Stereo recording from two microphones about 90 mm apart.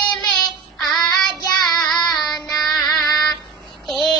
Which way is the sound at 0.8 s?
5° left (ahead or behind).